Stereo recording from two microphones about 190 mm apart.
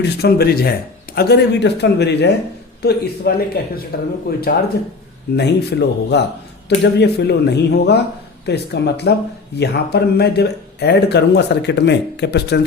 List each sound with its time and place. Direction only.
0.0 s speech: 55° left (ahead or behind)